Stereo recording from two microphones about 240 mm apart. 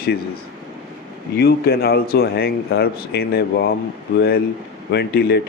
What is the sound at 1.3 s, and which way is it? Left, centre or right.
Speech, left.